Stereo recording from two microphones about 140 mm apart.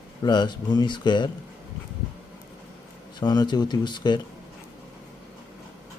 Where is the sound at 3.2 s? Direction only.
30° left (ahead or behind).